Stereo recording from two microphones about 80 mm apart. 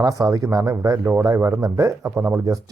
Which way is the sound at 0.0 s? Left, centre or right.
Right.